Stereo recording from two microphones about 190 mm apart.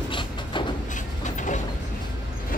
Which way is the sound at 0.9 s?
40° left (ahead or behind).